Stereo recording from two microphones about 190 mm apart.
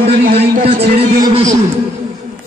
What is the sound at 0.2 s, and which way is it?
Speech, 50° right (ahead or behind).